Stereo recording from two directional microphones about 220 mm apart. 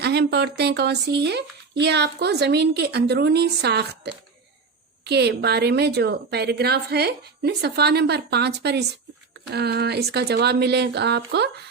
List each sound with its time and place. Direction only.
0.0 s speech: 50° right (ahead or behind)